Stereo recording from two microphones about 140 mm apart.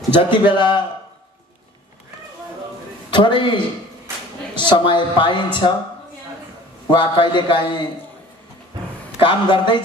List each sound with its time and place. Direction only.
0.1 s speech: 35° left (ahead or behind)
3.1 s a man's voice: 35° left (ahead or behind)
6.9 s speech: 35° left (ahead or behind)
9.2 s speech: 35° left (ahead or behind)